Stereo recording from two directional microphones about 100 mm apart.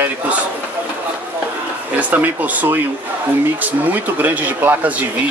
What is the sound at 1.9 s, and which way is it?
Speech, 15° right (ahead or behind).